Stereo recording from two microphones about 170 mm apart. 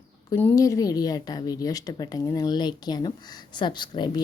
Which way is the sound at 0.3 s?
15° left (ahead or behind).